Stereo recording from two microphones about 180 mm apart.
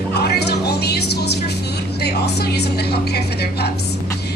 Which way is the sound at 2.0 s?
65° left (ahead or behind).